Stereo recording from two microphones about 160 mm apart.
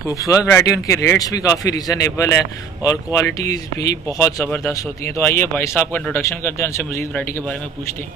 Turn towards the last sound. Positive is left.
turn(degrees=5)  # may be behind; listen again after turning